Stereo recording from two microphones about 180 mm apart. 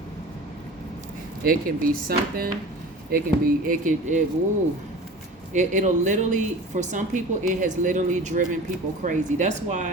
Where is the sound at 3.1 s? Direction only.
55° right (ahead or behind).